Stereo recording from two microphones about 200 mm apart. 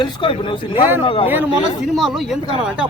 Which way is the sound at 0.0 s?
25° left (ahead or behind).